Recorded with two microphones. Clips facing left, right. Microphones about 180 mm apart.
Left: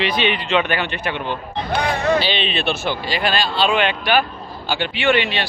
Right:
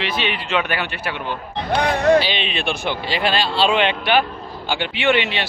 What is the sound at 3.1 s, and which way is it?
Speech, 25° right (ahead or behind).